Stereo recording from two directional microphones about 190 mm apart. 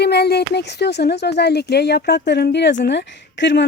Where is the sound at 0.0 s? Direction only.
60° left (ahead or behind).